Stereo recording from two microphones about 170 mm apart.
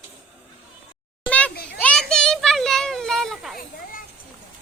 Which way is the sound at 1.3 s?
10° left (ahead or behind).